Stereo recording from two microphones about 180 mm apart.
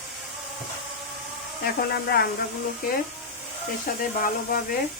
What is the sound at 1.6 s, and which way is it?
Speech, 65° left (ahead or behind).